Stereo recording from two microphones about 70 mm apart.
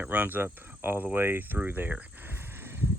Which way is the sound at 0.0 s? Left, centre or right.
Right.